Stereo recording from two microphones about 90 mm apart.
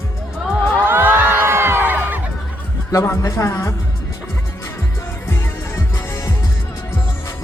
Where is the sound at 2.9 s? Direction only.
35° left (ahead or behind).